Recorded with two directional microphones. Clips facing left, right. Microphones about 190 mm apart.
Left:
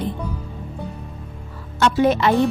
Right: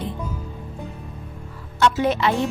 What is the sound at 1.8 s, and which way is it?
Speech, 45° left (ahead or behind).